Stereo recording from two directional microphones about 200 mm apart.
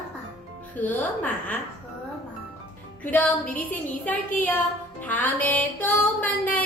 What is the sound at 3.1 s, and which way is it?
Music, 10° left (ahead or behind).